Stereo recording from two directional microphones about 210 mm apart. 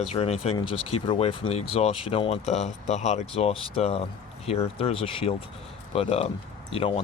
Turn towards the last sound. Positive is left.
turn(degrees=25)  # may be behind; listen again after turning